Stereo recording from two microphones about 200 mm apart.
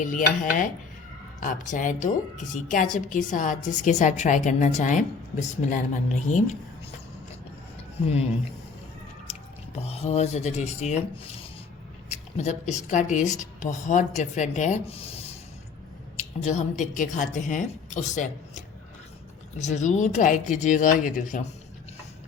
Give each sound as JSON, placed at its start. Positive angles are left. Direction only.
{"t": 0.0, "sound": "a woman's voice", "side_deg": 40}
{"t": 9.3, "sound": "chewing", "side_deg": 35}
{"t": 9.7, "sound": "a woman's voice", "side_deg": 30}
{"t": 12.0, "sound": "a woman's voice", "side_deg": 35}
{"t": 16.1, "sound": "a woman's voice", "side_deg": 35}